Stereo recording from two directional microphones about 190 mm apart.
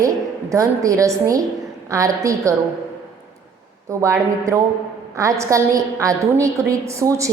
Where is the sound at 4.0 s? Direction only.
15° right (ahead or behind).